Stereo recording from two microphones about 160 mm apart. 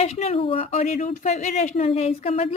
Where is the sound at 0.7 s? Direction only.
55° left (ahead or behind); by 2.5 s 40° left (ahead or behind).